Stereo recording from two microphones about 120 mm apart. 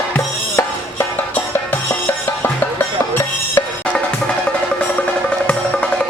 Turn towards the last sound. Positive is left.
turn(degrees=10)  # may be behind; listen again after turning